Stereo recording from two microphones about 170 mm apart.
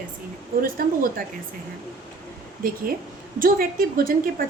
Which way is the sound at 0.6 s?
60° right (ahead or behind).